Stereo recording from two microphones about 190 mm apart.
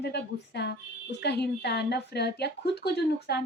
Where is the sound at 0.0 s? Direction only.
60° left (ahead or behind).